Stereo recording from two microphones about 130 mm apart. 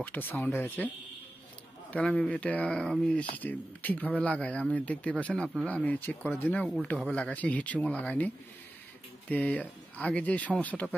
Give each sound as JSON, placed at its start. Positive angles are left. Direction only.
{"t": 0.0, "sound": "speech", "side_deg": 15}
{"t": 9.3, "sound": "speech", "side_deg": 10}